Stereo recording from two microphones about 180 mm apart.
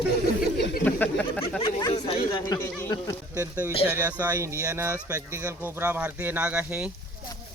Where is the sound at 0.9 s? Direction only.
10° left (ahead or behind).